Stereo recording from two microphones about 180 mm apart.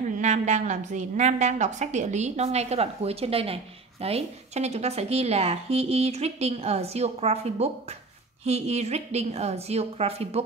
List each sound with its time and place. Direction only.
0.2 s a woman's voice: 40° right (ahead or behind)